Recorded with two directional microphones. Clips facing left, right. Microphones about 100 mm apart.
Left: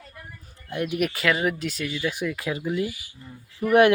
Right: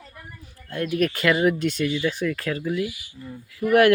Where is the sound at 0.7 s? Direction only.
15° left (ahead or behind).